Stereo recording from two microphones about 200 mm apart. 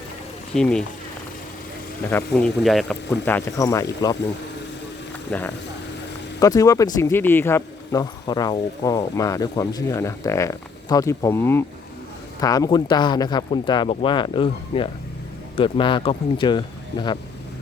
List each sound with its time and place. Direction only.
0.5 s speech: 5° left (ahead or behind)
2.0 s speech: 10° left (ahead or behind)
5.3 s speech: 5° left (ahead or behind)
6.4 s speech: 15° left (ahead or behind)